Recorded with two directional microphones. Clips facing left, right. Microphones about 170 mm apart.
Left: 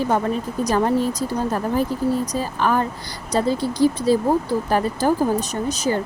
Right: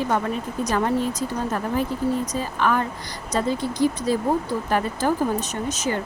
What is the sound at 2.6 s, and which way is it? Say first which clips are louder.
Speech: left 1 dB; 35° left (ahead or behind).